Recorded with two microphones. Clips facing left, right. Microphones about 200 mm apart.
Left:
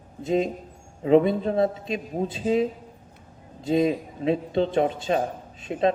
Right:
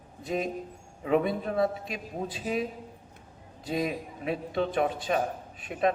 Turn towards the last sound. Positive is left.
turn(degrees=25)  # may be behind; listen again after turning